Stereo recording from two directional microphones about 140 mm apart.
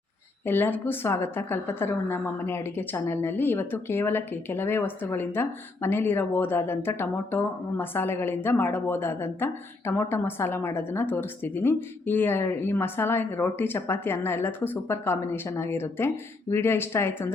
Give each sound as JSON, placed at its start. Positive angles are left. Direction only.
{"t": 0.4, "sound": "a woman's voice", "side_deg": 15}